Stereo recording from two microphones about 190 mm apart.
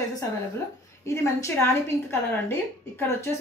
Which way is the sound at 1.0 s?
15° left (ahead or behind).